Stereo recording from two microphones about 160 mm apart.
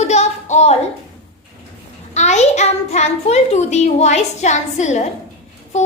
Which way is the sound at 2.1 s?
45° left (ahead or behind).